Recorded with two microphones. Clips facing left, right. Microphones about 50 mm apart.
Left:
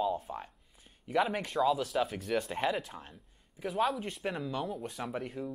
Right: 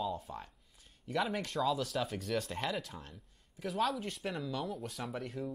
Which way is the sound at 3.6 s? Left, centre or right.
Centre.